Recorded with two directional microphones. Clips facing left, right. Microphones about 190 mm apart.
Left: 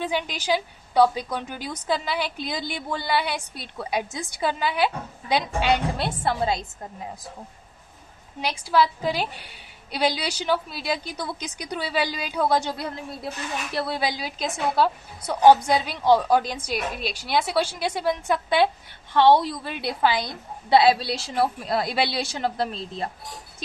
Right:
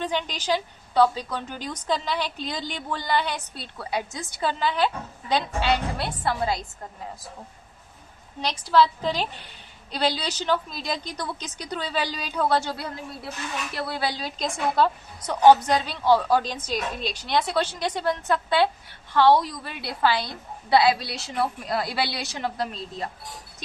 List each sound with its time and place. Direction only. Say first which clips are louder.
0.0 s a woman's voice: left 1 dB; 10° left (ahead or behind)
8.4 s a woman's voice: right 1 dB; 10° left (ahead or behind); by 23.0 s 30° left (ahead or behind)